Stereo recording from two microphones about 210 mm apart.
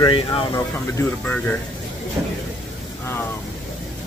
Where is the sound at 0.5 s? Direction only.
10° left (ahead or behind).